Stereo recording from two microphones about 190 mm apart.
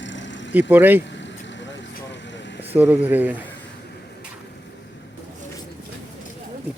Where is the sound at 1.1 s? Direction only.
70° left (ahead or behind).